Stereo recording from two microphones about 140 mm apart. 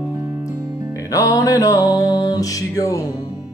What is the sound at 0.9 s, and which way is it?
Music, 25° left (ahead or behind).